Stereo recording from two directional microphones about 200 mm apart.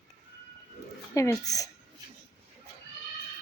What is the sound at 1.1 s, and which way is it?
Speech, 15° left (ahead or behind).